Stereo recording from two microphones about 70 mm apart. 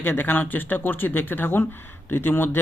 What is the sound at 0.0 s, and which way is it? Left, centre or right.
A man's voice, left.